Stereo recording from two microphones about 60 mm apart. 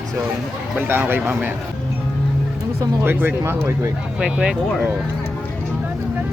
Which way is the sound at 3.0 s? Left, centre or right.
Right.